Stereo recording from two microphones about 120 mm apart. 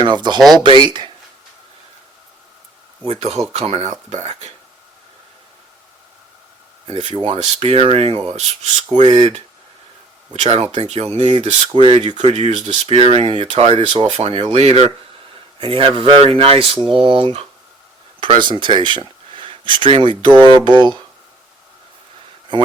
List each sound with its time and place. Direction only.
0.0 s speech: 40° right (ahead or behind)
3.0 s speech: 55° right (ahead or behind)
6.8 s speech: 50° right (ahead or behind)
9.1 s speech: 45° right (ahead or behind)
10.4 s speech: 65° right (ahead or behind)
11.7 s speech: 45° right (ahead or behind)
12.3 s speech: 60° right (ahead or behind)
15.5 s speech: 50° right (ahead or behind)